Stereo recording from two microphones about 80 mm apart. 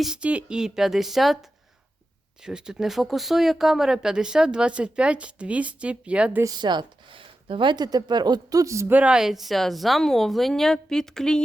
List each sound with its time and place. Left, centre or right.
0.2 s a woman's voice: centre
6.5 s speech: right
8.9 s speech: centre
9.1 s a woman's voice: centre